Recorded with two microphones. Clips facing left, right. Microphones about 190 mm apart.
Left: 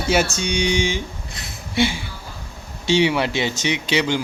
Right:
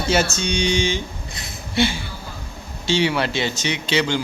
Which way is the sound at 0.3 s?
10° left (ahead or behind).